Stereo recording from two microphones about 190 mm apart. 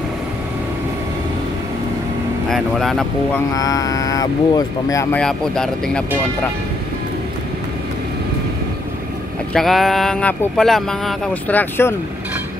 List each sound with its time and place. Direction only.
2.5 s speech: centre (ahead or behind)
3.5 s speech: 20° left (ahead or behind)
5.1 s speech: 5° left (ahead or behind)
9.5 s speech: centre (ahead or behind)